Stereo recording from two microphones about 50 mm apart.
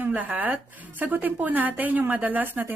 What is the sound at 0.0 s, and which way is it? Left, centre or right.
A woman's voice, right.